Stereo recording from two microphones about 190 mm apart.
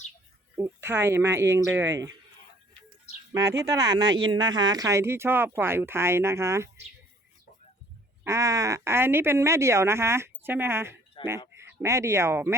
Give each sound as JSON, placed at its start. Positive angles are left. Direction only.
{"t": 0.5, "sound": "speech", "side_deg": -15}
{"t": 3.6, "sound": "speech", "side_deg": -20}
{"t": 8.2, "sound": "speech", "side_deg": -15}
{"t": 11.2, "sound": "a sound", "side_deg": 25}
{"t": 11.5, "sound": "speech", "side_deg": -15}